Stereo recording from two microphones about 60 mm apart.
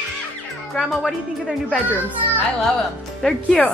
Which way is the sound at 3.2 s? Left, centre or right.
Centre.